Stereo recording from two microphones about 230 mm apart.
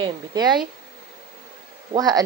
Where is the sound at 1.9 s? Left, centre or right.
Centre.